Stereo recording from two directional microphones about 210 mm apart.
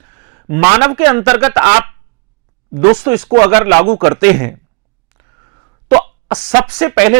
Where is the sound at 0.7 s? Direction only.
15° right (ahead or behind).